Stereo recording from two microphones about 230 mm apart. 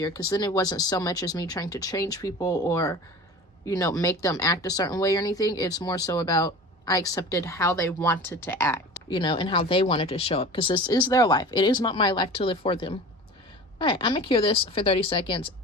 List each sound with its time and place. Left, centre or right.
0.0 s speech: centre